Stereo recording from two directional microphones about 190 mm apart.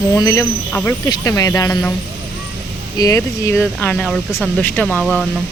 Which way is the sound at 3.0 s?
15° left (ahead or behind).